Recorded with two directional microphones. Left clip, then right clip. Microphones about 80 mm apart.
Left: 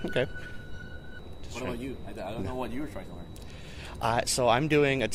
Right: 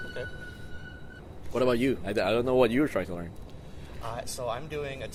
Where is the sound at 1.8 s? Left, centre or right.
Right.